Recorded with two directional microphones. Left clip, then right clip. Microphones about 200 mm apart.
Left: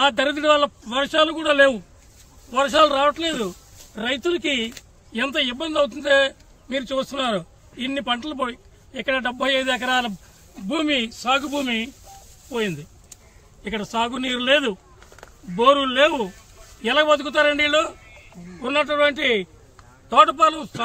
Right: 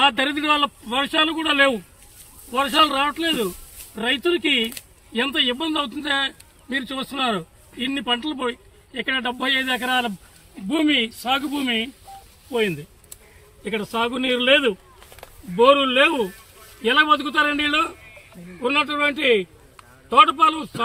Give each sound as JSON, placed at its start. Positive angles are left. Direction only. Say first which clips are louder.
{"t": 0.0, "sound": "speech", "louder": "even", "side_deg": 25}
{"t": 10.8, "sound": "a man's voice", "louder": "right 3 dB", "side_deg": 5}
{"t": 13.7, "sound": "a man's voice", "louder": "right 1 dB", "side_deg": 15}